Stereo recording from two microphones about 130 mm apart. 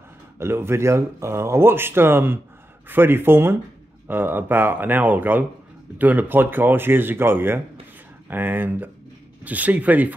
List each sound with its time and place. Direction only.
0.4 s speech: 20° right (ahead or behind)